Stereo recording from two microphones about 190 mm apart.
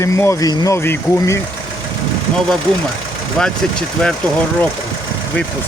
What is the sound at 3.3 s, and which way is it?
Speech, 5° left (ahead or behind).